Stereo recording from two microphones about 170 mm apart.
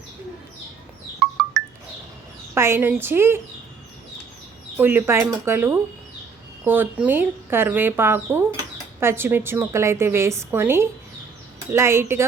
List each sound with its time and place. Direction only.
1.2 s music: centre (ahead or behind)
2.6 s a woman's voice: 15° right (ahead or behind)
4.8 s a woman's voice: 10° right (ahead or behind)